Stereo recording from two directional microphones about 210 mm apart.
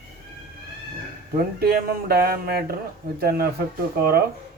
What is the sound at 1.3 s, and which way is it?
Speech, 45° right (ahead or behind).